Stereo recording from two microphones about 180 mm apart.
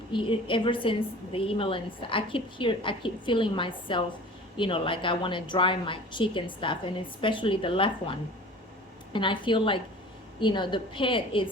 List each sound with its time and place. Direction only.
0.1 s a woman's voice: 30° left (ahead or behind)